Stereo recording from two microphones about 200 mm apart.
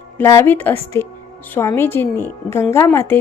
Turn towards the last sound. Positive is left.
turn(degrees=10)  # may be behind; listen again after turning